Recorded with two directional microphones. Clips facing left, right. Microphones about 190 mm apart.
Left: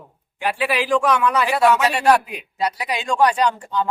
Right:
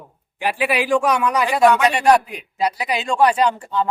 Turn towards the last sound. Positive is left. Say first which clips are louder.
# right 1 dB
turn(degrees=-5)  # may be behind; listen again after turning